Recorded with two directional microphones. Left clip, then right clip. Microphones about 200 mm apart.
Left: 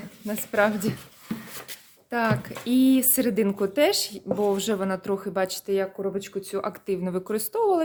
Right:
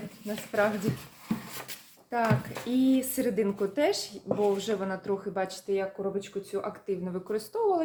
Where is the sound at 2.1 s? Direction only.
40° left (ahead or behind).